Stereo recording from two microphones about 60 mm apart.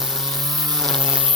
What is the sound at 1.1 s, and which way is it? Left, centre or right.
Insect, centre.